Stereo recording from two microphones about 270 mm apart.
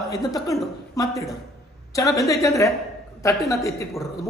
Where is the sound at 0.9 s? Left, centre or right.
Centre.